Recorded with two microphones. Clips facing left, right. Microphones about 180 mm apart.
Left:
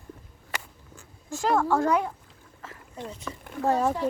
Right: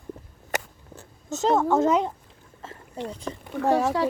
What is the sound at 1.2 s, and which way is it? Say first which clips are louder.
Speech: right 3 dB; 20° right (ahead or behind).